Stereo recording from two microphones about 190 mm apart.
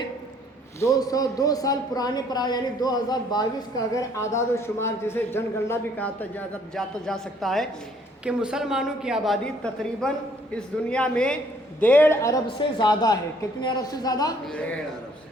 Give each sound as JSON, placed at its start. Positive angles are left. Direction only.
{"t": 0.8, "sound": "a man's voice", "side_deg": 15}
{"t": 14.4, "sound": "a man's voice", "side_deg": 5}